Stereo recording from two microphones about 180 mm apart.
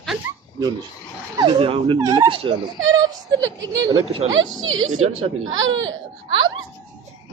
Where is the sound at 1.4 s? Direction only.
30° right (ahead or behind).